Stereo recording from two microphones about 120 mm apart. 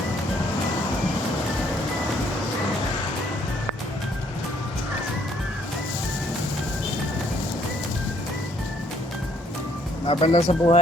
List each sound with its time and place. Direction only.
10.1 s speech: 50° left (ahead or behind)